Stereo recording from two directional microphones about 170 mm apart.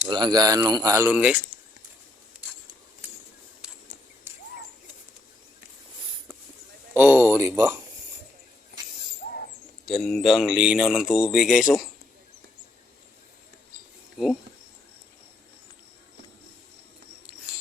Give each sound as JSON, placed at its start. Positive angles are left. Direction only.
{"t": 0.1, "sound": "speech", "side_deg": -25}
{"t": 3.6, "sound": "a sound", "side_deg": -5}
{"t": 4.3, "sound": "bird", "side_deg": -10}
{"t": 6.9, "sound": "speech", "side_deg": -10}
{"t": 9.8, "sound": "speech", "side_deg": 5}